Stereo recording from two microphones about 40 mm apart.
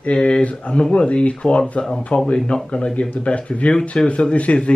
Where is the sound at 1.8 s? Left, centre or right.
Centre.